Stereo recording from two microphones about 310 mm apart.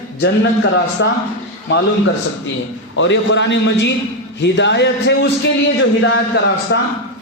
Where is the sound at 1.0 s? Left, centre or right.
Left.